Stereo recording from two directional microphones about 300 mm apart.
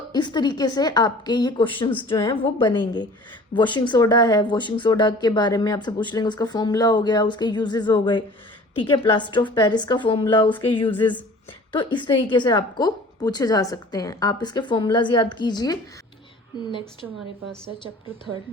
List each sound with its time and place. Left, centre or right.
0.1 s speech: centre
10.9 s speech: centre